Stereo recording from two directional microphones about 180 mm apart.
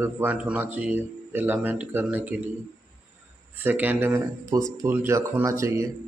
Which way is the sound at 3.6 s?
10° right (ahead or behind).